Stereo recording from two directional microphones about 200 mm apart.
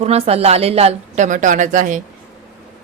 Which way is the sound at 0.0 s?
30° right (ahead or behind).